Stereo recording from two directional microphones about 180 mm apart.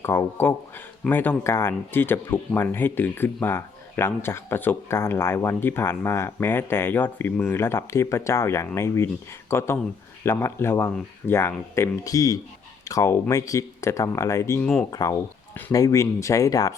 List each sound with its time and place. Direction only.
0.0 s speech: 15° left (ahead or behind)